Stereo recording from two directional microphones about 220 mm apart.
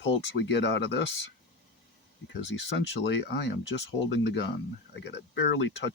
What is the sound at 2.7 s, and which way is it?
Speech, 55° left (ahead or behind).